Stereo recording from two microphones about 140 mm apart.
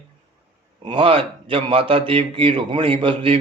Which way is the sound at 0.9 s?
40° right (ahead or behind).